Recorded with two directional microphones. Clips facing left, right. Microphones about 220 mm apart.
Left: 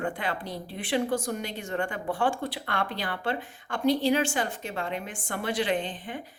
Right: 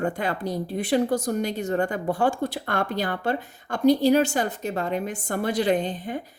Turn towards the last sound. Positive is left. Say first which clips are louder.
# right 5 dB
turn(degrees=-40)  # may be behind; listen again after turning